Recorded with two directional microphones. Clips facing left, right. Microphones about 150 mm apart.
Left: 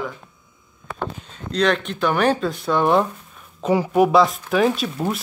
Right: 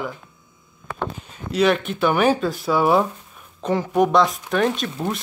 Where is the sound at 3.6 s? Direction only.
5° left (ahead or behind).